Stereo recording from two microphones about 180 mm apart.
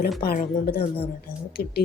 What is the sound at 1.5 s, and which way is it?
Speech, 55° left (ahead or behind).